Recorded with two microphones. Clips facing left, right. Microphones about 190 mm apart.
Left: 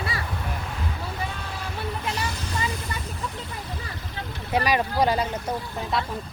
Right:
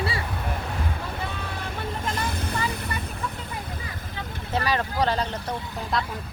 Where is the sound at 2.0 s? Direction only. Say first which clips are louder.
Right 1 dB; 55° right (ahead or behind).